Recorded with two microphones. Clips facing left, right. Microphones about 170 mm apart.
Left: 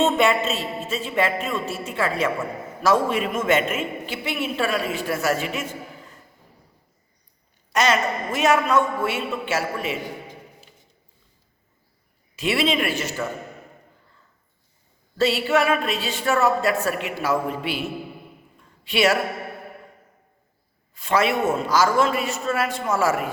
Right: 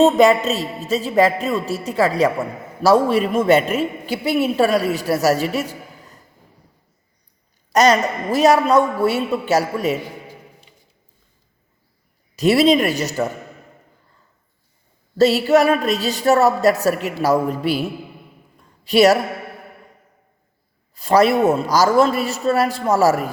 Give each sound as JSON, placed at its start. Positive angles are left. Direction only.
{"t": 0.0, "sound": "speech", "side_deg": -40}
{"t": 7.7, "sound": "speech", "side_deg": -40}
{"t": 12.4, "sound": "speech", "side_deg": -40}
{"t": 15.2, "sound": "speech", "side_deg": -40}
{"t": 18.9, "sound": "speech", "side_deg": -40}
{"t": 20.9, "sound": "speech", "side_deg": -35}